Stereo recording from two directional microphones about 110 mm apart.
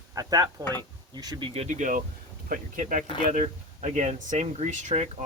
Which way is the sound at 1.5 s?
90° right.